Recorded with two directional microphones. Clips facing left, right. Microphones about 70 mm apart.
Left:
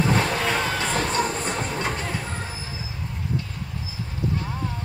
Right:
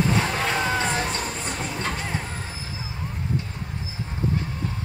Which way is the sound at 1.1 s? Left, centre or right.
Left.